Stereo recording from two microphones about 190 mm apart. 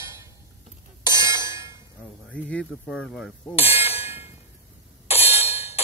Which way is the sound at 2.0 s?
5° left (ahead or behind).